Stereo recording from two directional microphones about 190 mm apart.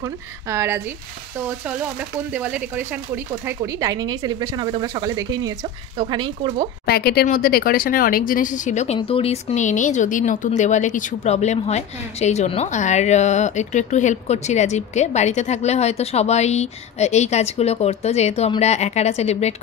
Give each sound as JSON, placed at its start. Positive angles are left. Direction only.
{"t": 0.0, "sound": "speech", "side_deg": -15}
{"t": 6.9, "sound": "speech", "side_deg": 55}